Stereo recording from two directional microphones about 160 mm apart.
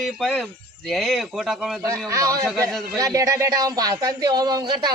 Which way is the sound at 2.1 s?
20° right (ahead or behind).